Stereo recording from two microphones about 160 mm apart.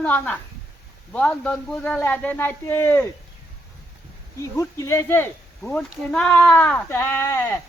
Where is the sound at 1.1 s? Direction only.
10° left (ahead or behind).